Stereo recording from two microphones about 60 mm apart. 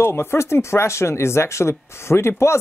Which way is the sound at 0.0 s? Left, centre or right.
Left.